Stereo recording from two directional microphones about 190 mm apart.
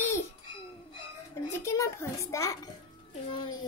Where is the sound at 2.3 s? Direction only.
15° left (ahead or behind).